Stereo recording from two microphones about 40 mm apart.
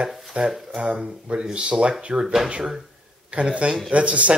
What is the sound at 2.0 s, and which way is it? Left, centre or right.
Speech, right.